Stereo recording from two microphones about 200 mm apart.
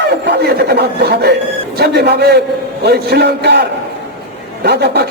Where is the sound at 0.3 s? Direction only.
55° right (ahead or behind).